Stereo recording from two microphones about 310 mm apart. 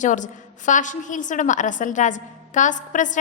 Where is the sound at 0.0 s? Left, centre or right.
Left.